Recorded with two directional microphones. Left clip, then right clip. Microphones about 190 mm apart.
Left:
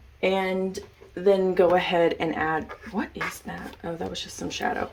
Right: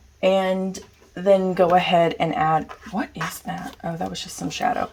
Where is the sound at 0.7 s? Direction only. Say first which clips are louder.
Left 1 dB; 45° right (ahead or behind).